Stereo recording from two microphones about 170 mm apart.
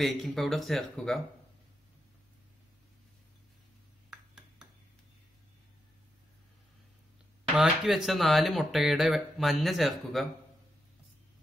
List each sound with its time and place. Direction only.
0.0 s speech: centre (ahead or behind)
4.1 s a sound: 5° right (ahead or behind)
7.5 s speech: 5° right (ahead or behind)